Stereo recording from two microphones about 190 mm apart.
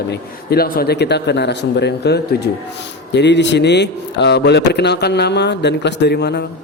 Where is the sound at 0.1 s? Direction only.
55° left (ahead or behind).